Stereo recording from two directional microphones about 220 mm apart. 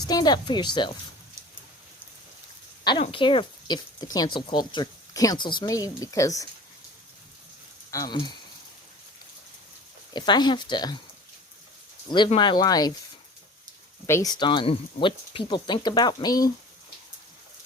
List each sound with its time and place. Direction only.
0.1 s speech: 20° left (ahead or behind)
2.8 s speech: 20° left (ahead or behind)
7.9 s speech: 15° left (ahead or behind)
10.1 s speech: 20° left (ahead or behind)
12.1 s speech: 20° left (ahead or behind)
14.1 s speech: 15° left (ahead or behind)